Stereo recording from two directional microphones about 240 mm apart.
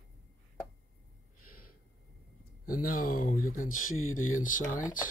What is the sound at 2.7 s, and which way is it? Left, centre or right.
Speech, left.